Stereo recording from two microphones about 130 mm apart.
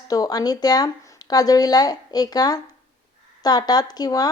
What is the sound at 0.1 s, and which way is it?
Speech, 30° left (ahead or behind).